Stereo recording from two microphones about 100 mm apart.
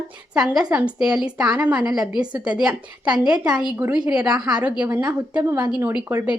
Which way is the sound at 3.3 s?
40° right (ahead or behind).